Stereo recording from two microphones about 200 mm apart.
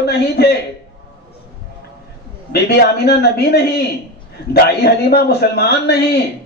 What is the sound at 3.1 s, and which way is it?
A man's voice, 55° left (ahead or behind).